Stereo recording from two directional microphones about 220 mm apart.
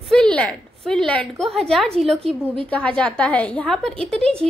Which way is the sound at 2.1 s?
25° right (ahead or behind).